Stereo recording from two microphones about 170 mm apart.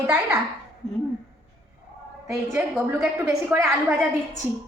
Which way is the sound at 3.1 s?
15° right (ahead or behind).